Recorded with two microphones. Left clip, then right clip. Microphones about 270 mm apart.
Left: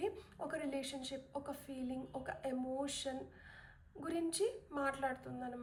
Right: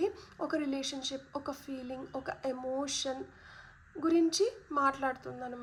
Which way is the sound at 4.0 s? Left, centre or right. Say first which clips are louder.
Right 10 dB; centre.